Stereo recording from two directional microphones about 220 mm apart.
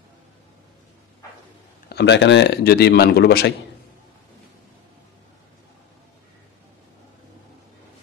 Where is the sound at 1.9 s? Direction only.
50° left (ahead or behind).